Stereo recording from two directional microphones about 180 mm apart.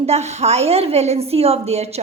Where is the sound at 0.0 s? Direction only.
35° right (ahead or behind).